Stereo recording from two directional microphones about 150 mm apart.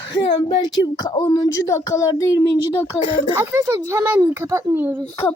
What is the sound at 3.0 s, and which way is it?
Speech, 40° left (ahead or behind).